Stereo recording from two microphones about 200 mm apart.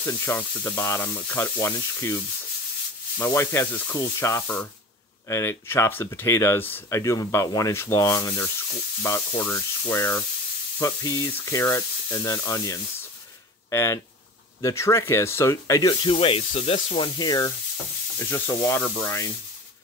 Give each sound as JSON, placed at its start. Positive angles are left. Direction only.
{"t": 0.0, "sound": "speech", "side_deg": 10}